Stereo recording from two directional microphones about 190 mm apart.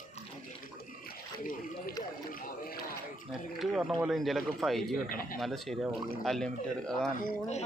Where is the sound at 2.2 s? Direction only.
50° left (ahead or behind).